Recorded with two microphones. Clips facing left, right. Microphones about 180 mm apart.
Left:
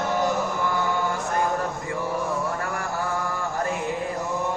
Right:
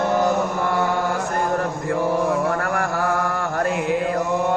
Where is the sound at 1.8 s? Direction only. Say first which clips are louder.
Right 7 dB; 70° right (ahead or behind).